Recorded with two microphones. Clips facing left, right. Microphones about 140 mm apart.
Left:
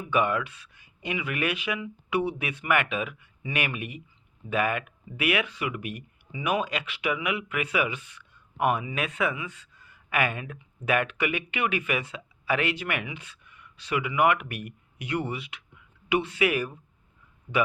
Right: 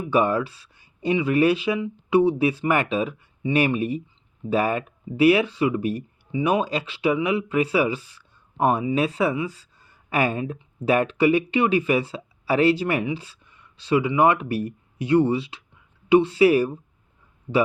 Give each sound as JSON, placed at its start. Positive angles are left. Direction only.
{"t": 0.1, "sound": "speech", "side_deg": -35}